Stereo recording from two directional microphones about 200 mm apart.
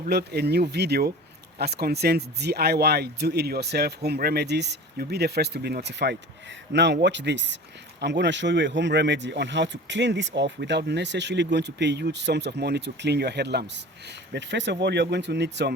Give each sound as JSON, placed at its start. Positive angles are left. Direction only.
{"t": 0.0, "sound": "speech", "side_deg": -55}